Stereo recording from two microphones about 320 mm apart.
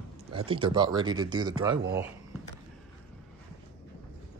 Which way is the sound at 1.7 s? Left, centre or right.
Right.